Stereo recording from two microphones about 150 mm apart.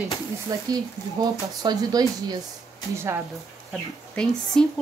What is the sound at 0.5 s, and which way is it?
Speech, 25° right (ahead or behind).